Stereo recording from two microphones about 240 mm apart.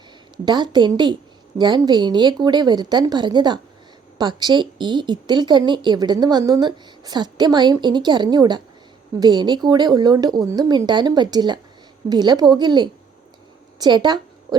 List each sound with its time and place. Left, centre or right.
0.4 s a woman's voice: centre